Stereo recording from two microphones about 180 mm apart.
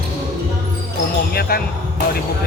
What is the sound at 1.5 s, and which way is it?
Speech, 55° left (ahead or behind).